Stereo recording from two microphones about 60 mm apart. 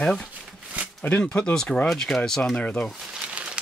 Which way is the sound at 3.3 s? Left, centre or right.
Centre.